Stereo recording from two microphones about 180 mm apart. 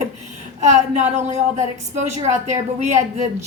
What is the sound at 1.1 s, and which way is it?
Speech, 40° right (ahead or behind).